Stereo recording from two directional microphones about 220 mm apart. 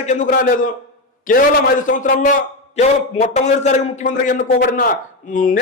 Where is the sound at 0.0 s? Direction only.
35° left (ahead or behind).